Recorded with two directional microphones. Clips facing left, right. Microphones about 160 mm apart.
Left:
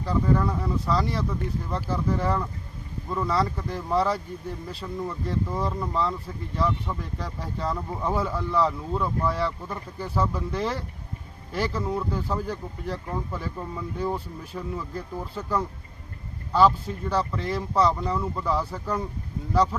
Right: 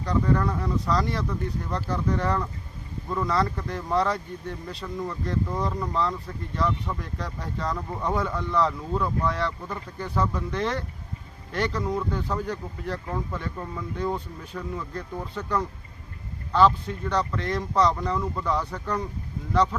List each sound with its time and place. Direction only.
0.0 s speech: 5° left (ahead or behind)